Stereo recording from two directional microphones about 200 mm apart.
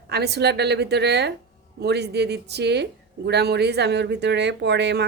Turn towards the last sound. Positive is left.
turn(degrees=-55)  # may be behind; listen again after turning